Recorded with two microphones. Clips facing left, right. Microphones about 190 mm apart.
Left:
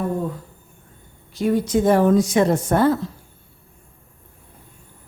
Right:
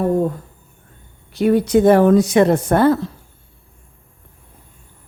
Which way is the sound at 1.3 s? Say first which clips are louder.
Right 5 dB; 65° right (ahead or behind).